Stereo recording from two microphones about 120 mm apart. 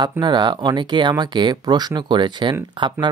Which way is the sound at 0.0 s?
40° right (ahead or behind).